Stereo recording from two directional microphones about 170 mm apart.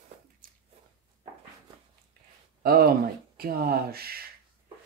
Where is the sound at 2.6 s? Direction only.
60° right (ahead or behind).